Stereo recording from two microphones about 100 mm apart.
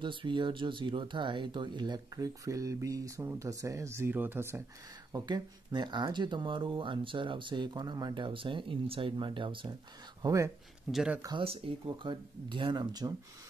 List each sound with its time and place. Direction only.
0.0 s speech: 55° right (ahead or behind); by 4.6 s 25° right (ahead or behind)
5.1 s speech: 45° right (ahead or behind)
10.2 s speech: 30° right (ahead or behind)
10.9 s speech: 5° right (ahead or behind)
11.3 s speech: 70° right (ahead or behind)
12.1 s speech: 55° right (ahead or behind)